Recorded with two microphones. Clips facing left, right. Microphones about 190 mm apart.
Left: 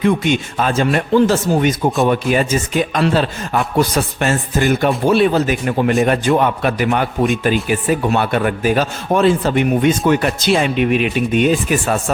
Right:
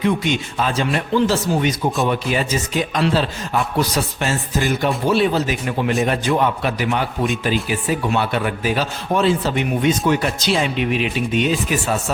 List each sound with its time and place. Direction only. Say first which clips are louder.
0.0 s a man's voice: left 4 dB; 50° left (ahead or behind)